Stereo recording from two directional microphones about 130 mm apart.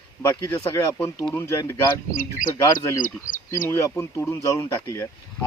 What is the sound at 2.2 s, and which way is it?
Speech, 90° left.